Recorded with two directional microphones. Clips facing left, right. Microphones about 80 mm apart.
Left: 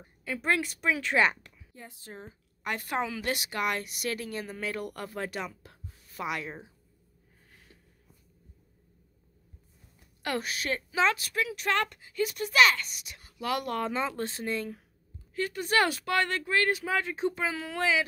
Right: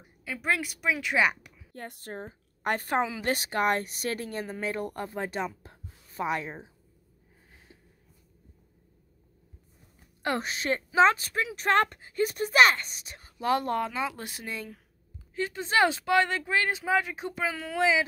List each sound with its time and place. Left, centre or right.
0.0 s speech: centre
1.7 s speech: right
2.2 s a woman's voice: right
3.0 s a woman's voice: right
3.3 s speech: right
10.2 s speech: right
13.8 s speech: centre
15.3 s speech: right
17.5 s speech: centre
17.7 s a woman's voice: centre